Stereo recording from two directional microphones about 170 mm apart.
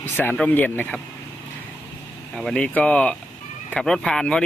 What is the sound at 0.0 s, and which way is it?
Speech, 10° left (ahead or behind).